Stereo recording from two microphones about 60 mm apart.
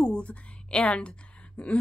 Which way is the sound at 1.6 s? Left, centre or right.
Left.